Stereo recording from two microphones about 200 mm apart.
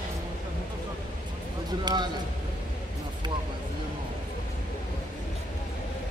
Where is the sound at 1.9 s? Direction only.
20° right (ahead or behind).